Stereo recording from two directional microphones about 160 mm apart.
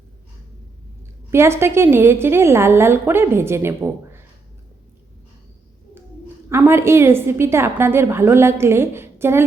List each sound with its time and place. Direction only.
1.3 s a woman's voice: 15° right (ahead or behind)
6.5 s a woman's voice: 15° right (ahead or behind)